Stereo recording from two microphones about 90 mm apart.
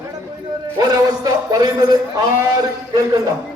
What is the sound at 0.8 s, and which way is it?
Speech, 45° right (ahead or behind).